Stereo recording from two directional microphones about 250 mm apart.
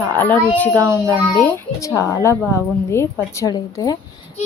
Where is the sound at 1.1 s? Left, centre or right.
Centre.